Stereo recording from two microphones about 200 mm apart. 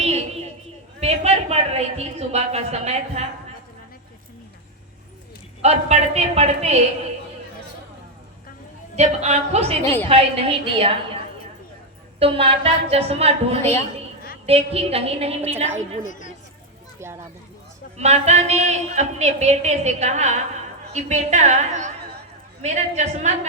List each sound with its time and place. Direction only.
0.9 s a woman's voice: 30° right (ahead or behind)
5.6 s a woman's voice: 35° right (ahead or behind)
9.0 s a woman's voice: 35° right (ahead or behind)
9.8 s a woman's voice: 10° left (ahead or behind)
10.1 s a woman's voice: 30° right (ahead or behind)
12.2 s a woman's voice: 30° right (ahead or behind)
13.6 s a woman's voice: 10° left (ahead or behind)
14.4 s a woman's voice: 30° right (ahead or behind)
17.9 s a woman's voice: 35° right (ahead or behind)